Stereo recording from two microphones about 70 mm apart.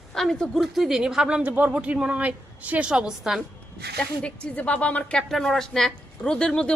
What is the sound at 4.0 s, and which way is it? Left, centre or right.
Speech, centre.